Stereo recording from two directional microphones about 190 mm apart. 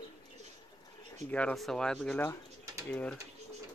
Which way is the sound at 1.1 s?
5° left (ahead or behind).